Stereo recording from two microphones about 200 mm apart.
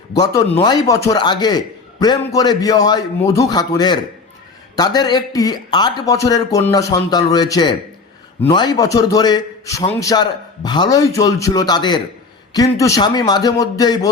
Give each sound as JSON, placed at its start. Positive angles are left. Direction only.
{"t": 0.1, "sound": "a man's voice", "side_deg": 20}